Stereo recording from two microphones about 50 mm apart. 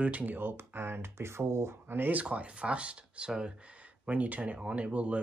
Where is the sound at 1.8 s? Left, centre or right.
Right.